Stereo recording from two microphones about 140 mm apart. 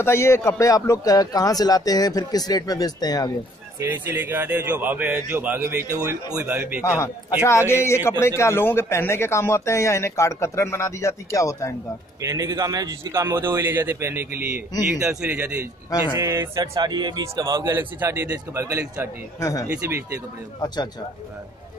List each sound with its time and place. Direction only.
0.0 s a man's voice: 20° left (ahead or behind)
3.8 s speech: 15° right (ahead or behind)
7.4 s a man's voice: 20° left (ahead or behind)
12.2 s a man's voice: 25° right (ahead or behind)
20.6 s speech: 30° left (ahead or behind)